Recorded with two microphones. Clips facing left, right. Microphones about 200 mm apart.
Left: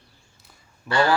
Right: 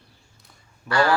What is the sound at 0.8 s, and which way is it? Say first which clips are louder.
Speech: even; 25° left (ahead or behind).